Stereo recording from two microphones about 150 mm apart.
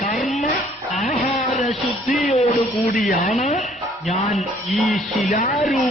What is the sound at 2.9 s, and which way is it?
Speech, 60° left (ahead or behind).